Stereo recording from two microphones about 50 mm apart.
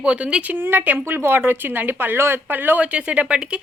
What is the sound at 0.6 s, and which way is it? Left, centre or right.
A woman's voice, right.